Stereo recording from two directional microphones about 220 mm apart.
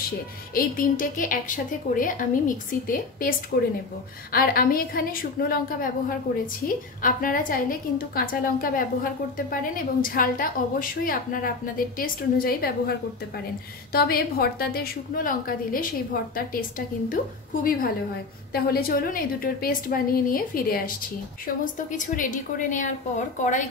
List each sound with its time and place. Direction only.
0.6 s a woman's voice: 40° left (ahead or behind)
13.9 s a woman's voice: 45° left (ahead or behind)
18.5 s a woman's voice: 45° left (ahead or behind)